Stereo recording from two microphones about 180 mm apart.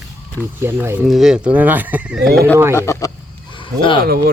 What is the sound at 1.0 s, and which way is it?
Speech, centre (ahead or behind).